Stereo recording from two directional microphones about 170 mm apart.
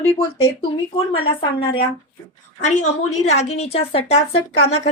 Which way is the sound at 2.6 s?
45° left (ahead or behind).